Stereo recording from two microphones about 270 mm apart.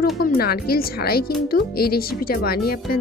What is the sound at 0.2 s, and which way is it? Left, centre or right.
Speech, left.